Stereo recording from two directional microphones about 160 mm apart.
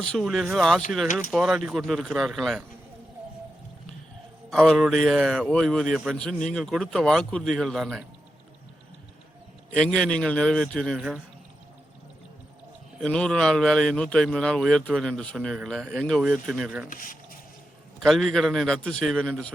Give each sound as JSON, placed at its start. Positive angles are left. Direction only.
{"t": 0.0, "sound": "a man's voice", "side_deg": 5}
{"t": 4.4, "sound": "a man's voice", "side_deg": 0}
{"t": 9.7, "sound": "a man's voice", "side_deg": 5}
{"t": 13.0, "sound": "a man's voice", "side_deg": 5}
{"t": 16.9, "sound": "speech", "side_deg": 60}
{"t": 18.0, "sound": "a man's voice", "side_deg": 0}